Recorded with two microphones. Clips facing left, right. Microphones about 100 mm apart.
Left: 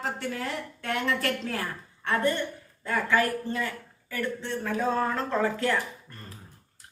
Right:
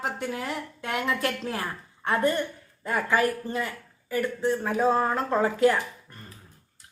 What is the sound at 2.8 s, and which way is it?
Speech, 20° right (ahead or behind).